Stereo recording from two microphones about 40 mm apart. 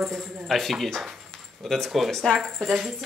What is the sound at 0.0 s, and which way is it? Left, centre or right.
Speech, centre.